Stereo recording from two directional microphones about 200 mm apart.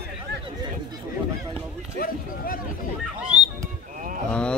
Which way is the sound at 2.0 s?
45° left (ahead or behind).